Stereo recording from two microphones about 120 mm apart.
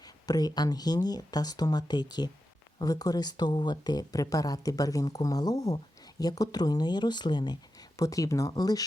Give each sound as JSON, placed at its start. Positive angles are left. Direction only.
{"t": 0.0, "sound": "speech", "side_deg": 30}